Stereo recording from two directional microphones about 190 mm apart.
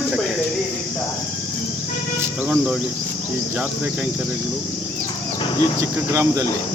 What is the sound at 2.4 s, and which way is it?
Speech, 5° right (ahead or behind).